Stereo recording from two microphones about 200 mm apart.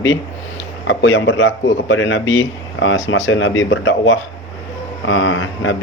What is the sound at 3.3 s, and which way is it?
Speech, 75° left (ahead or behind).